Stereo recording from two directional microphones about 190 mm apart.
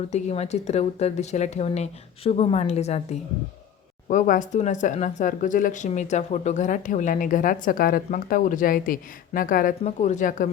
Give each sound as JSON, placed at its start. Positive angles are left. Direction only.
{"t": 0.1, "sound": "speech", "side_deg": 35}